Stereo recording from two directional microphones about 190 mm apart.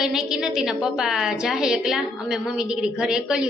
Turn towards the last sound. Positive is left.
turn(degrees=-5)  # may be behind; listen again after turning